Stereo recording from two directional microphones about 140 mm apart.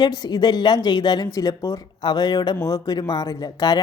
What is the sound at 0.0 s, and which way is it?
Speech, 30° left (ahead or behind).